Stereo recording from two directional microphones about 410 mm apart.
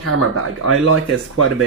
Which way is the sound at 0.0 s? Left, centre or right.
Right.